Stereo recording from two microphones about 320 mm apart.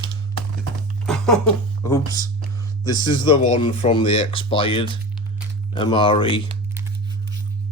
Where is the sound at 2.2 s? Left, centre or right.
Centre.